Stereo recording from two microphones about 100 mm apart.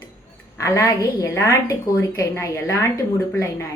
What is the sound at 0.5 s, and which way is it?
A woman's voice, 30° left (ahead or behind).